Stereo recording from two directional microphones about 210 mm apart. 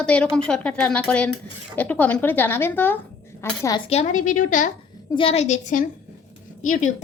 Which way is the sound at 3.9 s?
35° left (ahead or behind).